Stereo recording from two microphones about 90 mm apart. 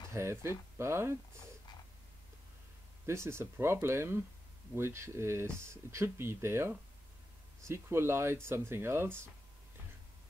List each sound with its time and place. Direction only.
0.1 s speech: 30° right (ahead or behind)
3.1 s speech: 30° right (ahead or behind)